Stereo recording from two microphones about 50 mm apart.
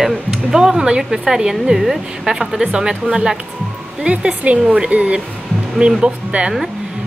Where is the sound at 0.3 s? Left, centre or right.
Centre.